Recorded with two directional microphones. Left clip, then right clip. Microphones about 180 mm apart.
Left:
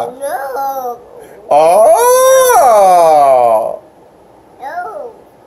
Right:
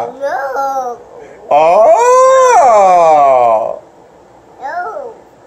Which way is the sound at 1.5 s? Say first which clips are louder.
Even; 10° left (ahead or behind).